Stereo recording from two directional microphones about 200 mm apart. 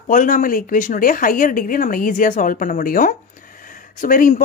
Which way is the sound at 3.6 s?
40° left (ahead or behind).